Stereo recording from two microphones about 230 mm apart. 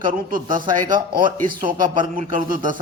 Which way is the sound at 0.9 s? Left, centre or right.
Centre.